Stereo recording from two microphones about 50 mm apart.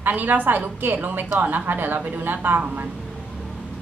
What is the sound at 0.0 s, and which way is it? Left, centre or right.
A woman's voice, right.